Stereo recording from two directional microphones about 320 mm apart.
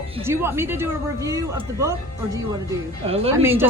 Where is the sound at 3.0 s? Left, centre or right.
Centre.